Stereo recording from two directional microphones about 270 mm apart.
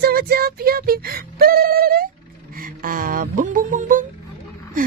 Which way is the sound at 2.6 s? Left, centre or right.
Right.